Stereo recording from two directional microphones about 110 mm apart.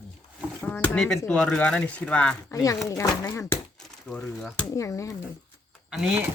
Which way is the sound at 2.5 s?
30° left (ahead or behind).